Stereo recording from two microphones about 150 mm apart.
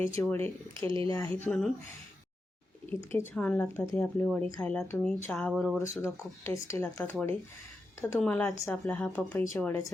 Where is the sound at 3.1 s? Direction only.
10° left (ahead or behind).